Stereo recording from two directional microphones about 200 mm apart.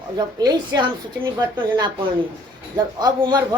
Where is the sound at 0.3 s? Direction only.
20° right (ahead or behind).